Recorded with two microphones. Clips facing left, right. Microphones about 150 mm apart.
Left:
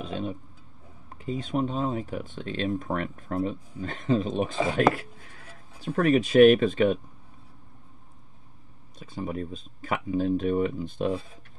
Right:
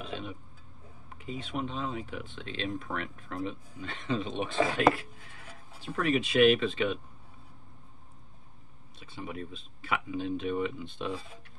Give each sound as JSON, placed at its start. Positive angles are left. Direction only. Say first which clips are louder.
{"t": 0.0, "sound": "speech", "louder": "left 6 dB", "side_deg": 40}
{"t": 9.0, "sound": "speech", "louder": "left 7 dB", "side_deg": 40}